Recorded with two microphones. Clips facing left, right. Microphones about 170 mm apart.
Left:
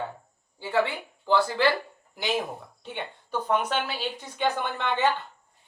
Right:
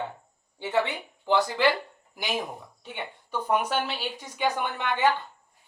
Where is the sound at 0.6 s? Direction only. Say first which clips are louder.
Left 1 dB; 20° right (ahead or behind).